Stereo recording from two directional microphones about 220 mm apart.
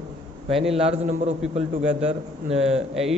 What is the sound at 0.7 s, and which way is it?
A man's voice, 25° right (ahead or behind).